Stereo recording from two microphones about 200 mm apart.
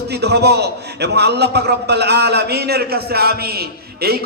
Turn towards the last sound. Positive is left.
turn(degrees=-50)  # may be behind; listen again after turning